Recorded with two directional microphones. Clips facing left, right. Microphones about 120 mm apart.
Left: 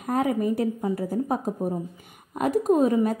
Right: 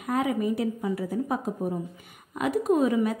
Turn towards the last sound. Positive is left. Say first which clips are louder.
# left 2 dB
turn(degrees=40)  # may be behind; listen again after turning